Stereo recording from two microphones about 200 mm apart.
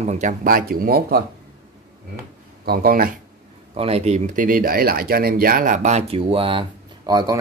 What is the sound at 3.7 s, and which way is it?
Speech, 30° right (ahead or behind).